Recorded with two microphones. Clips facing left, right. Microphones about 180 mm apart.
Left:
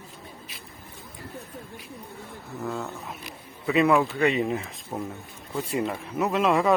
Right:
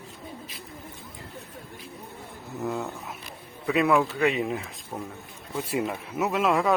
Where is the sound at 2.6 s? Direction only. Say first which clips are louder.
Right 2 dB; 15° right (ahead or behind).